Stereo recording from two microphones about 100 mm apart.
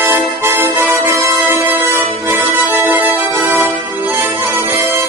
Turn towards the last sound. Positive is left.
turn(degrees=-25)  # may be behind; listen again after turning